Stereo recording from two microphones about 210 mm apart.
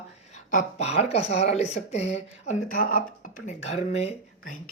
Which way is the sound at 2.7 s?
45° left (ahead or behind).